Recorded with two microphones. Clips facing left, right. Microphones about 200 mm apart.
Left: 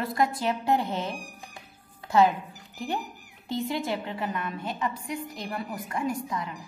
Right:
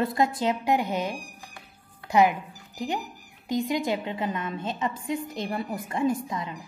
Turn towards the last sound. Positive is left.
turn(degrees=-20)  # may be behind; listen again after turning